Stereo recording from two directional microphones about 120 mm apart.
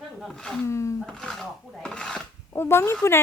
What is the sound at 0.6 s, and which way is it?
Speech, 25° left (ahead or behind).